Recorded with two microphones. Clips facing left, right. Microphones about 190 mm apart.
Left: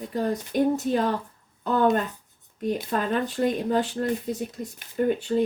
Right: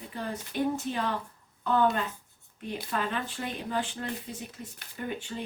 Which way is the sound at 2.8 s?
45° left (ahead or behind).